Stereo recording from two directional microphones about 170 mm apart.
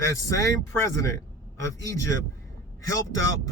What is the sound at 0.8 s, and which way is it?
Speech, 20° left (ahead or behind).